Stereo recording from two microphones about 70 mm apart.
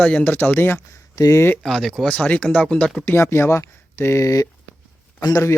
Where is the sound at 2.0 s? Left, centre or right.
Centre.